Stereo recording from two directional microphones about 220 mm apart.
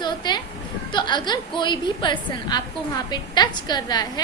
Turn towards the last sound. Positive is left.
turn(degrees=20)  # may be behind; listen again after turning